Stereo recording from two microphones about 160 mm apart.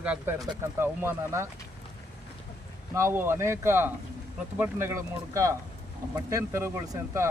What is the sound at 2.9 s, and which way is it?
Speech, 15° right (ahead or behind).